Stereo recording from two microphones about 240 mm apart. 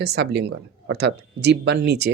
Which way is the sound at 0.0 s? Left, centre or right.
Right.